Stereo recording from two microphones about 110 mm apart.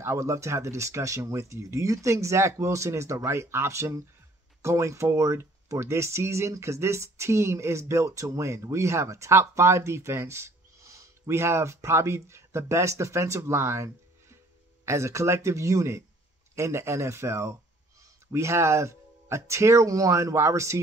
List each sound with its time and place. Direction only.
0.0 s speech: 25° right (ahead or behind)